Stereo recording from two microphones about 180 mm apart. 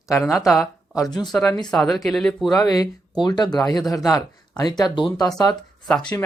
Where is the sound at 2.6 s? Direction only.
20° left (ahead or behind).